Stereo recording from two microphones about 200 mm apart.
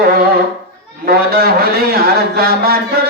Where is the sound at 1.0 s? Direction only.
50° right (ahead or behind).